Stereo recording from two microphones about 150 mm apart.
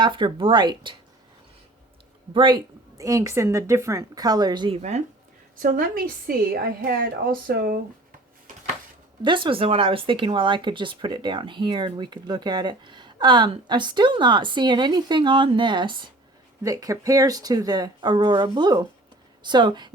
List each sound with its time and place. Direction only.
0.0 s speech: 30° right (ahead or behind)
2.3 s speech: 30° right (ahead or behind)
3.0 s speech: 20° right (ahead or behind)
4.8 s speech: 50° right (ahead or behind)
5.5 s a woman's voice: 65° right (ahead or behind)
9.2 s speech: 35° right (ahead or behind)